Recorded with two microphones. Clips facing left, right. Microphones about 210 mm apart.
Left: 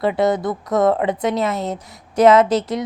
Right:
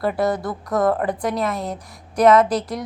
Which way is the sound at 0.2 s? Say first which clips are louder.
Left 4 dB; 20° left (ahead or behind).